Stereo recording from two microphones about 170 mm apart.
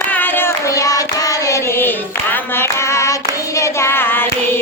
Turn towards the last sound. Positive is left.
turn(degrees=10)  # may be behind; listen again after turning